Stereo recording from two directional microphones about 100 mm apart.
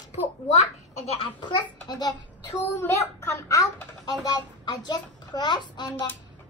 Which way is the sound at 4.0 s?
40° left (ahead or behind).